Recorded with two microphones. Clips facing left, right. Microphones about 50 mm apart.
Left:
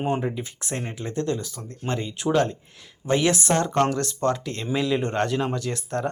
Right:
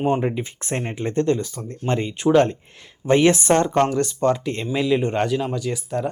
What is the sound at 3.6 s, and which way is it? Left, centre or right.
Speech, centre.